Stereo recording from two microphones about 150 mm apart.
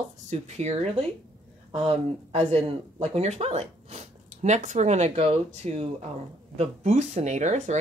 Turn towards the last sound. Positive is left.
turn(degrees=-50)  # may be behind; listen again after turning